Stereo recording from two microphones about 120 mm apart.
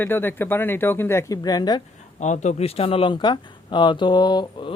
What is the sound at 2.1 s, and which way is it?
Speech, 75° left (ahead or behind).